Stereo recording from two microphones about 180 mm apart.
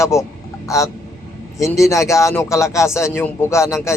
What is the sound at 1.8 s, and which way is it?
Speech, 15° left (ahead or behind).